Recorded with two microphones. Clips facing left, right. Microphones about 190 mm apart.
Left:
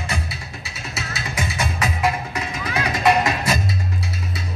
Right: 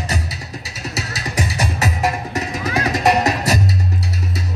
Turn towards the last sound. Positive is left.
turn(degrees=-40)  # may be behind; listen again after turning